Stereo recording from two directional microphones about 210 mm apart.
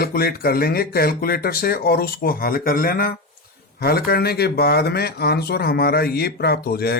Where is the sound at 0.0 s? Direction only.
45° left (ahead or behind).